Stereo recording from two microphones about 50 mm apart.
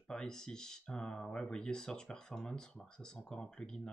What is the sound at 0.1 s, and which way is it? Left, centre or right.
Speech, centre.